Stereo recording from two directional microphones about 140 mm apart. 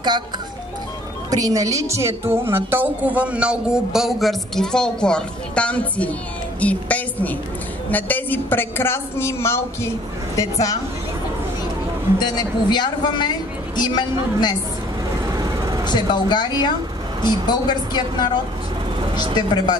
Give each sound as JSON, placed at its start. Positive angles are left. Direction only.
{"t": 1.3, "sound": "a woman's voice", "side_deg": -25}
{"t": 12.2, "sound": "a man's voice", "side_deg": 30}
{"t": 15.3, "sound": "vehicle", "side_deg": -25}
{"t": 15.8, "sound": "a man's voice", "side_deg": 30}
{"t": 19.3, "sound": "a man's voice", "side_deg": 30}